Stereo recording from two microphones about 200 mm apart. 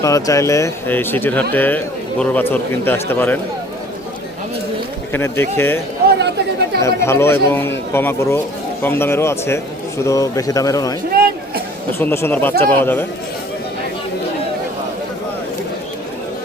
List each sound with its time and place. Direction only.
0.0 s speech: 15° left (ahead or behind)
5.1 s speech: 10° left (ahead or behind)
6.1 s chatter: 60° right (ahead or behind)
6.8 s speech: 15° left (ahead or behind)
11.1 s a sound: 50° right (ahead or behind)
11.9 s speech: 10° left (ahead or behind)